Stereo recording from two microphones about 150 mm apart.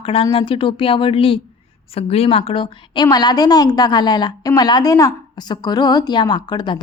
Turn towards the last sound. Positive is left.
turn(degrees=30)  # may be behind; listen again after turning